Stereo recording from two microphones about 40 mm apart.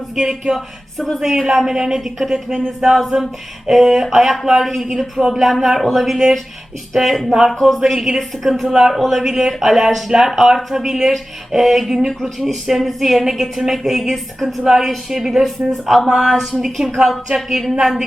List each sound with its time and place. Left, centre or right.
0.3 s a woman's voice: centre
1.2 s a woman's voice: centre
14.6 s a woman's voice: centre